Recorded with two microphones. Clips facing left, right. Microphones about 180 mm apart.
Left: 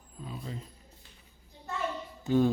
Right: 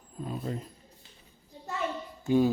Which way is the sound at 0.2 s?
50° right (ahead or behind).